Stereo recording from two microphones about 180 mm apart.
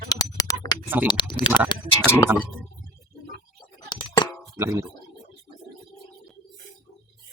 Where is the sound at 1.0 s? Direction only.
25° left (ahead or behind).